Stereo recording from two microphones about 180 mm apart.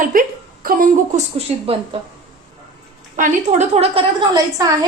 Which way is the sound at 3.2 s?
45° right (ahead or behind).